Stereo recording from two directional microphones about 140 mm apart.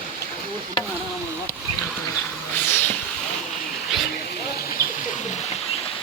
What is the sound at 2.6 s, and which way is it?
Vehicle, 15° left (ahead or behind).